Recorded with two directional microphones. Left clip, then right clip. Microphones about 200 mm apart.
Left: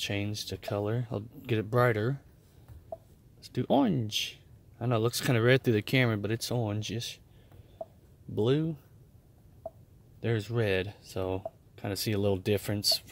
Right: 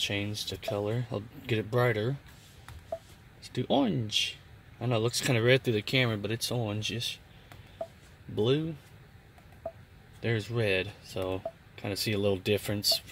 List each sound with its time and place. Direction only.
0.0 s speech: 20° left (ahead or behind)
3.4 s speech: 20° left (ahead or behind)
8.4 s speech: 20° left (ahead or behind)
10.2 s speech: 15° left (ahead or behind)